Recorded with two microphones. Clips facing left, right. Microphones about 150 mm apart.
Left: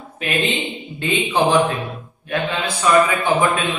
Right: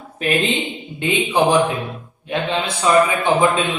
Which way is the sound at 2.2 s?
25° right (ahead or behind).